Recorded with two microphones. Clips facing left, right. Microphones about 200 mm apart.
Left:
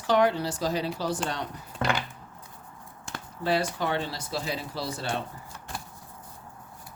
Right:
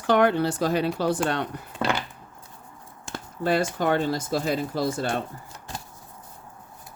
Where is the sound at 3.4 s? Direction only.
50° right (ahead or behind).